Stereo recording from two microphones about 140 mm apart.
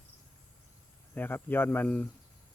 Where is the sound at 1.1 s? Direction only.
15° left (ahead or behind).